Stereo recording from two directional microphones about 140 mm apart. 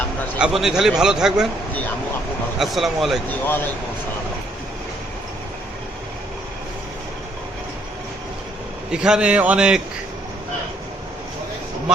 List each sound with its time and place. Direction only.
0.3 s a man's voice: 5° right (ahead or behind)
2.6 s a man's voice: centre (ahead or behind)
3.2 s speech: 15° left (ahead or behind)
8.9 s a man's voice: 5° right (ahead or behind)